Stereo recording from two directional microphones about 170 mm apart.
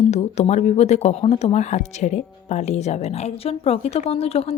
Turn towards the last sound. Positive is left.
turn(degrees=35)  # may be behind; listen again after turning